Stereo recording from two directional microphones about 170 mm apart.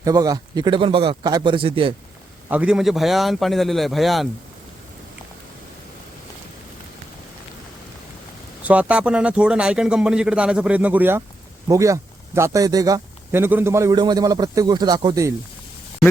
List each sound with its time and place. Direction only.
0.0 s speech: 20° right (ahead or behind)
2.5 s a man's voice: 5° right (ahead or behind)
8.6 s a man's voice: 10° right (ahead or behind)